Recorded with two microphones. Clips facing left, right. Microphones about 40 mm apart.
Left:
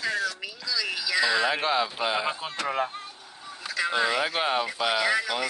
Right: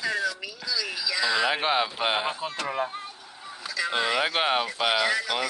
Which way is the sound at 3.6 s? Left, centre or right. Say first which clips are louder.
Left 1 dB; left.